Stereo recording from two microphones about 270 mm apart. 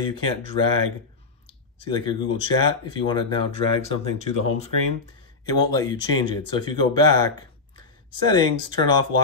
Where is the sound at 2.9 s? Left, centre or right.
Centre.